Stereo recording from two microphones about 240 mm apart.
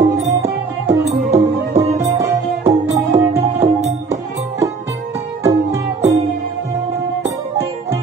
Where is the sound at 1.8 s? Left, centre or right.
Centre.